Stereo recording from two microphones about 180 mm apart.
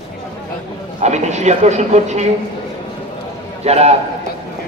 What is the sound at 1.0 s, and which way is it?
Speech, 40° right (ahead or behind).